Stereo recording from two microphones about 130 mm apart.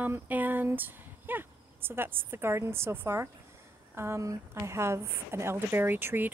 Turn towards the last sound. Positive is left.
turn(degrees=-15)  # may be behind; listen again after turning